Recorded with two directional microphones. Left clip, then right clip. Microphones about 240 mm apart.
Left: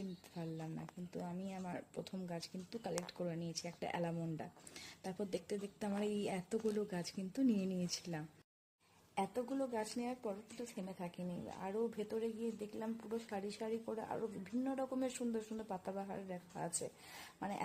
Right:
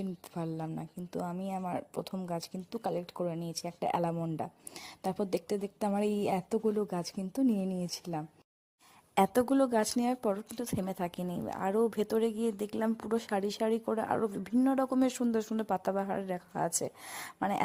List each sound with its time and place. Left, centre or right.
0.3 s speech: right
9.1 s speech: right